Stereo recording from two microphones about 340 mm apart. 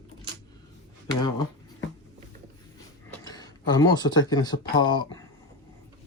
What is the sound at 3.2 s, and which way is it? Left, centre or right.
Speech, centre.